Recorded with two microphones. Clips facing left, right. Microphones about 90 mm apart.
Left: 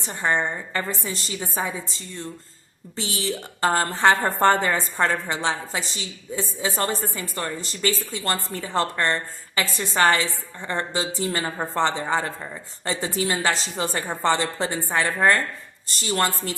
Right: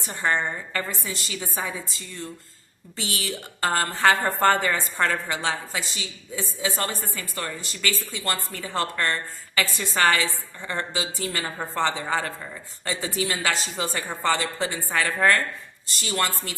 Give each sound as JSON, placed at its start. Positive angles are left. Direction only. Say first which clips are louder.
{"t": 0.1, "sound": "a woman's voice", "louder": "left 1 dB", "side_deg": 20}
{"t": 0.9, "sound": "a woman's voice", "louder": "left 3 dB", "side_deg": 30}
{"t": 2.9, "sound": "a woman's voice", "louder": "left 3 dB", "side_deg": 30}
{"t": 15.9, "sound": "a woman's voice", "louder": "left 3 dB", "side_deg": 35}